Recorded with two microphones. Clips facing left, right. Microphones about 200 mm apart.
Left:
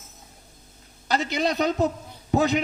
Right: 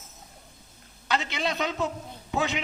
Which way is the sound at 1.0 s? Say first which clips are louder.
Left 4 dB; 40° left (ahead or behind).